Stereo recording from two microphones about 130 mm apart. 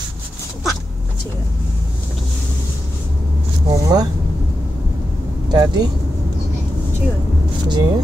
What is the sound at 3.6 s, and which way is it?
Speech, 30° right (ahead or behind).